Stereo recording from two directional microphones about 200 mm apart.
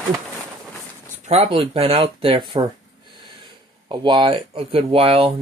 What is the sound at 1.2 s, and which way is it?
Speech, 30° right (ahead or behind).